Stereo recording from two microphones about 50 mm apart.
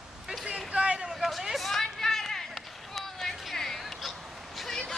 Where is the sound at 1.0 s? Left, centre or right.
Centre.